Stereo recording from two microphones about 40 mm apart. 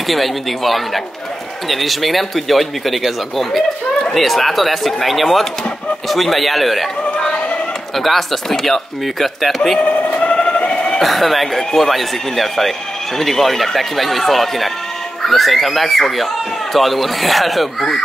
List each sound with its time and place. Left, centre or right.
0.0 s speech: centre
7.9 s speech: centre
9.8 s a sound: left
10.3 s siren: left
11.0 s speech: centre